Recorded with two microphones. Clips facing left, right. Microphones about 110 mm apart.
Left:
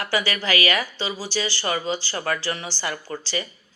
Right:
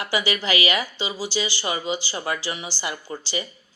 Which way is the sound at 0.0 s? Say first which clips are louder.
Even; 15° right (ahead or behind).